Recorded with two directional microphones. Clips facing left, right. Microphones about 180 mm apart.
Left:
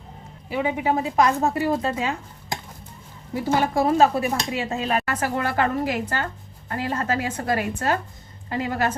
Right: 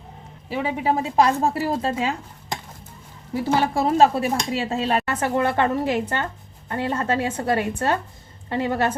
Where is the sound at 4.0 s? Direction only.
30° right (ahead or behind).